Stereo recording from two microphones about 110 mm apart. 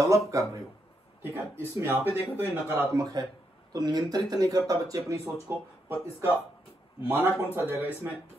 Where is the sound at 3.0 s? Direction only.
35° right (ahead or behind).